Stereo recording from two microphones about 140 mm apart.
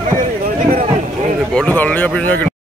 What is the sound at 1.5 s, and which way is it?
Speech, 10° left (ahead or behind).